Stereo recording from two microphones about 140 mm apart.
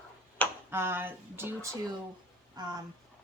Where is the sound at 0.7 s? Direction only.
15° right (ahead or behind).